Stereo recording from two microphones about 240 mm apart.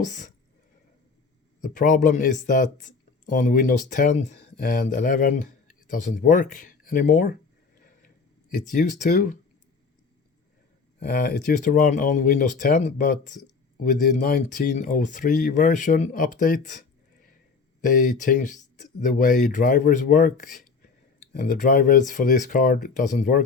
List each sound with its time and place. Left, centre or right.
0.0 s speech: left
1.6 s speech: left
7.8 s a sound: left
11.0 s speech: left